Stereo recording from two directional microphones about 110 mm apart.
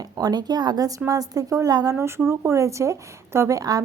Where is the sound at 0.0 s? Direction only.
35° right (ahead or behind).